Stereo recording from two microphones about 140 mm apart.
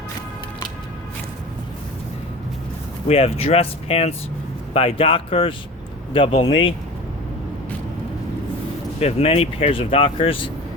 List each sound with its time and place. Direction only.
3.1 s speech: 45° left (ahead or behind)
9.0 s speech: 45° left (ahead or behind)